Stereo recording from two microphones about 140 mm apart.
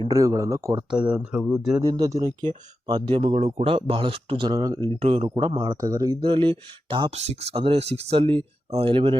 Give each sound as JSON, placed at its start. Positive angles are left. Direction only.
{"t": 0.1, "sound": "speech", "side_deg": -25}
{"t": 0.9, "sound": "speech", "side_deg": -10}
{"t": 1.8, "sound": "speech", "side_deg": -25}
{"t": 3.2, "sound": "speech", "side_deg": -50}
{"t": 4.5, "sound": "speech", "side_deg": -30}
{"t": 5.0, "sound": "speech", "side_deg": -50}
{"t": 6.2, "sound": "speech", "side_deg": -35}
{"t": 7.1, "sound": "speech", "side_deg": -50}